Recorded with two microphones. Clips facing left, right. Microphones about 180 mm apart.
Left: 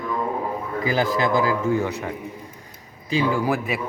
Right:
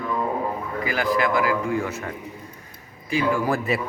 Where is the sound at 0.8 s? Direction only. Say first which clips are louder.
Left 1 dB; 30° left (ahead or behind).